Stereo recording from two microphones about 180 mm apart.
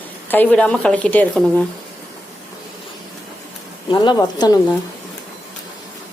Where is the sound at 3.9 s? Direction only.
25° left (ahead or behind).